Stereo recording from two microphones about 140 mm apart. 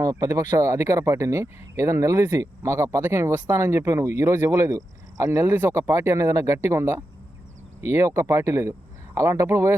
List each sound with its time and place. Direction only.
0.0 s speech: 25° right (ahead or behind)